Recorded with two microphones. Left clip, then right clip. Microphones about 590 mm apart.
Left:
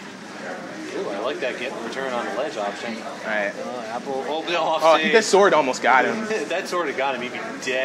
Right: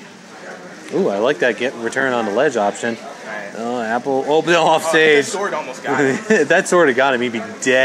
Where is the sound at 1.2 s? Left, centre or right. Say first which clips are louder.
Right 9 dB; right.